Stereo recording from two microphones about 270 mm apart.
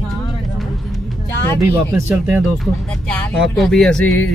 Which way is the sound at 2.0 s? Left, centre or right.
Centre.